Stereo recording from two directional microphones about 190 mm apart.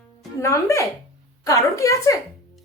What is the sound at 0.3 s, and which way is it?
Speech, 15° left (ahead or behind).